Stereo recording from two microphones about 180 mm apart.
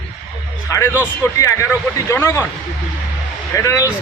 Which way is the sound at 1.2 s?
15° left (ahead or behind).